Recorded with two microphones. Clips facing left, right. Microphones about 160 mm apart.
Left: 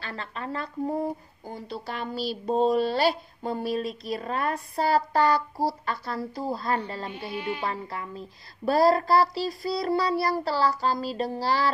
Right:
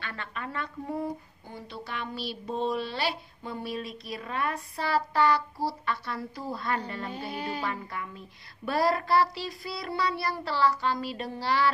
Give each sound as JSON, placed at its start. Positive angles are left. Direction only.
{"t": 0.0, "sound": "speech", "side_deg": 35}
{"t": 7.1, "sound": "music", "side_deg": -35}
{"t": 7.6, "sound": "speech", "side_deg": 35}